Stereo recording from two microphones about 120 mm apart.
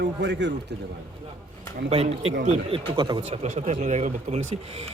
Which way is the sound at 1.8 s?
60° right (ahead or behind).